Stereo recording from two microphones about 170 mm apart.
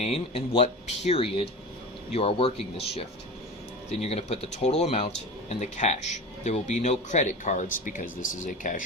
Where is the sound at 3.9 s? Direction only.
40° left (ahead or behind).